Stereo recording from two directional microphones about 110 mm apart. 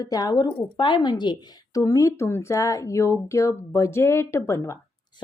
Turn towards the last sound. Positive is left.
turn(degrees=25)  # may be behind; listen again after turning